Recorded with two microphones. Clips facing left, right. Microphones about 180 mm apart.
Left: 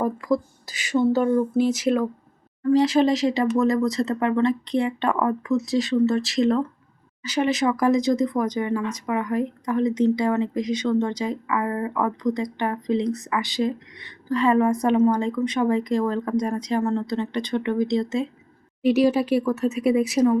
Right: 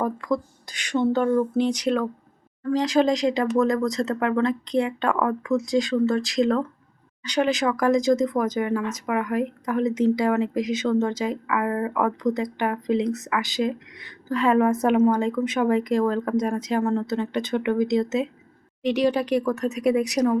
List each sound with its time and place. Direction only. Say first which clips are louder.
0.0 s speech: left 2 dB; 5° left (ahead or behind)